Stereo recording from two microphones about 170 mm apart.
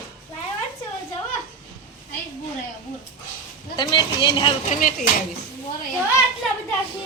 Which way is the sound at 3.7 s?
25° left (ahead or behind).